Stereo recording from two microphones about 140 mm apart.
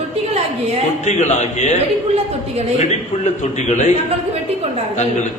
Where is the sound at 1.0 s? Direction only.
55° left (ahead or behind).